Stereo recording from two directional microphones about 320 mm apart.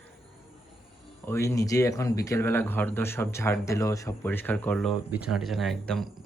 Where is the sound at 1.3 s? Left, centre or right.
Centre.